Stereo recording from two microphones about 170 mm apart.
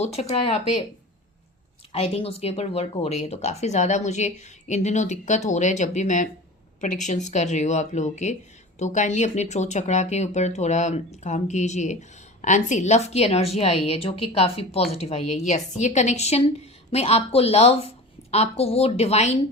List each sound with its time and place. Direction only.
0.0 s speech: 40° left (ahead or behind)
1.9 s speech: 35° left (ahead or behind)